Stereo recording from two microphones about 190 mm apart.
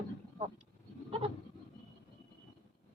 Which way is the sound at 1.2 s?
30° right (ahead or behind).